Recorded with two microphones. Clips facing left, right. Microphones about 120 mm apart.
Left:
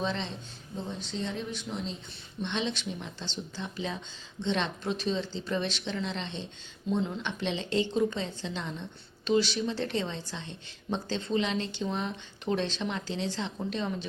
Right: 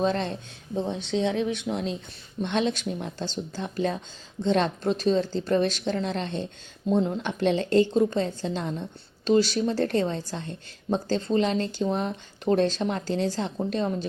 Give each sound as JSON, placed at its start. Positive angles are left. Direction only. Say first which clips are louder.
{"t": 0.0, "sound": "speech", "louder": "right 7 dB", "side_deg": -50}
{"t": 0.8, "sound": "speech", "louder": "right 9 dB", "side_deg": -65}
{"t": 2.4, "sound": "speech", "louder": "right 7 dB", "side_deg": -50}